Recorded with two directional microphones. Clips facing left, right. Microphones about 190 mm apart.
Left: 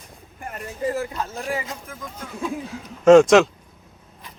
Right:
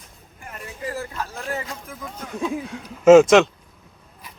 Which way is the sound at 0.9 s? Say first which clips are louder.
Left 4 dB; 20° left (ahead or behind).